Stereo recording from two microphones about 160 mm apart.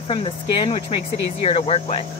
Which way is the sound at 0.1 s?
35° left (ahead or behind).